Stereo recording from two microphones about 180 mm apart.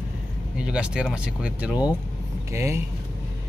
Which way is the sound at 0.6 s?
5° right (ahead or behind).